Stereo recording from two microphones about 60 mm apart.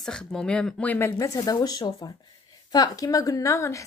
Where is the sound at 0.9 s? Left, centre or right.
Left.